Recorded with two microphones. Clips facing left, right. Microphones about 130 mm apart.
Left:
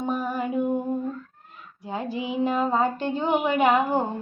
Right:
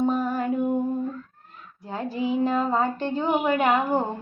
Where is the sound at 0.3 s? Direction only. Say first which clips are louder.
Right 2 dB; 15° left (ahead or behind).